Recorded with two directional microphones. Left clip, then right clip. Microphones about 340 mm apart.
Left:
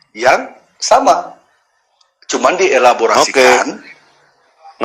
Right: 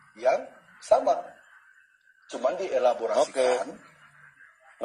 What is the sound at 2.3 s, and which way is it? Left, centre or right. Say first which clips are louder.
A man's voice: left 16 dB; left.